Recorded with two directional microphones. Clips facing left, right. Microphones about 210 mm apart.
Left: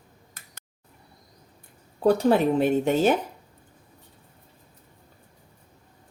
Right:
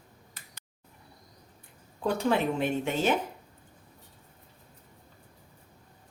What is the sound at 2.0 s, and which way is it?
Speech, 40° left (ahead or behind).